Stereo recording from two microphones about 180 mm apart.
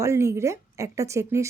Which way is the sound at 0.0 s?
15° right (ahead or behind).